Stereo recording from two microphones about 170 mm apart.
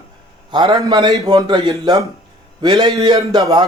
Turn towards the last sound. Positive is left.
turn(degrees=-25)  # may be behind; listen again after turning